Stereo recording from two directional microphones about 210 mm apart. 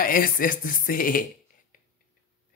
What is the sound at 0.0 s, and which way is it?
Speech, 40° left (ahead or behind).